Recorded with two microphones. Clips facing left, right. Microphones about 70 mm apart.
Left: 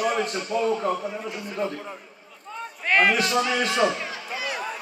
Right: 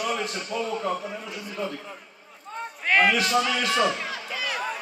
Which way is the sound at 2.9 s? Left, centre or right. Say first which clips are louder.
Even; left.